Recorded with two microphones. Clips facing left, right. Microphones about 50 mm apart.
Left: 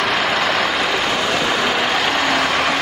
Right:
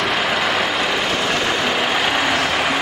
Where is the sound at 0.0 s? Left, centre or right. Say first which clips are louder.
Left 1 dB; centre.